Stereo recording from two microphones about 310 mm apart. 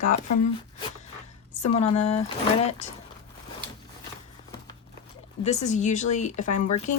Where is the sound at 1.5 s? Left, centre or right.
Left.